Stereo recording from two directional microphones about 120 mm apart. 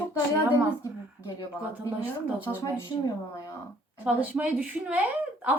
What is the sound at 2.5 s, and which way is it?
Speech, 30° left (ahead or behind).